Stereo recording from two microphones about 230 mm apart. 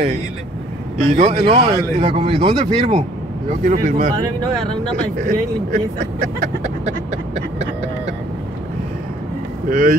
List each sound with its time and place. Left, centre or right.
1.1 s speech: right
3.4 s speech: right
5.1 s speech: right
9.7 s speech: right